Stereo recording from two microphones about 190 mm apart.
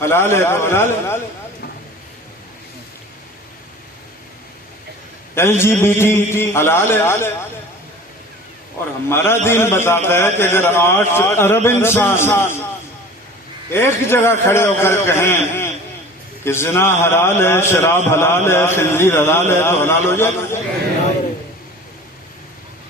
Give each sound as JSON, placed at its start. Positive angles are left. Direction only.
{"t": 0.0, "sound": "a man's voice", "side_deg": 15}
{"t": 5.3, "sound": "a man's voice", "side_deg": 10}
{"t": 9.0, "sound": "a man's voice", "side_deg": 15}
{"t": 13.7, "sound": "a man's voice", "side_deg": 15}